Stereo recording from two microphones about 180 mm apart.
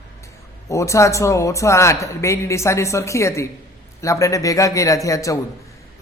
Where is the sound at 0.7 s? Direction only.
15° left (ahead or behind).